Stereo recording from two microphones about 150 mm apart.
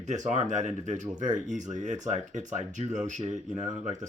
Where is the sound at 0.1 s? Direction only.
50° right (ahead or behind).